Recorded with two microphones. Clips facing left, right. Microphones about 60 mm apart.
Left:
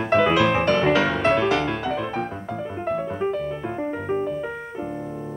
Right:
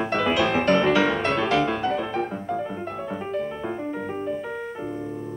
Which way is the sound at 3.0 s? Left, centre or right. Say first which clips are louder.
Left 3 dB; centre.